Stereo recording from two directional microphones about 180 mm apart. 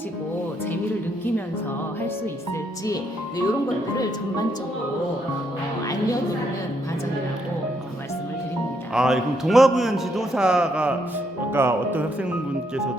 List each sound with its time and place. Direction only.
2.8 s speech: 20° left (ahead or behind)
8.9 s a man's voice: 5° right (ahead or behind)